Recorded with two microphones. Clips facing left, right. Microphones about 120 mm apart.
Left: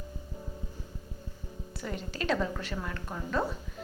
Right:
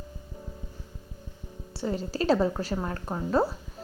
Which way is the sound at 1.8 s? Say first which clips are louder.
Right 7 dB; 30° right (ahead or behind).